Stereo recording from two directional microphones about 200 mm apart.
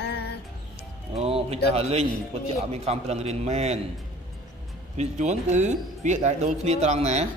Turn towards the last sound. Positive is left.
turn(degrees=-35)  # may be behind; listen again after turning